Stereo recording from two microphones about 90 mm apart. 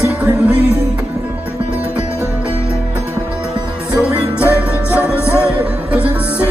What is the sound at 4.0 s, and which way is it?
Music, 15° right (ahead or behind).